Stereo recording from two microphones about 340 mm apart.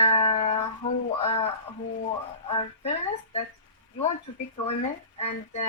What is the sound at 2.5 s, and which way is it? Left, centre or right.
Speech, centre.